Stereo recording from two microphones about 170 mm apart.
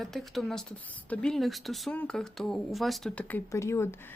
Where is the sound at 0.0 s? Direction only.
Centre (ahead or behind).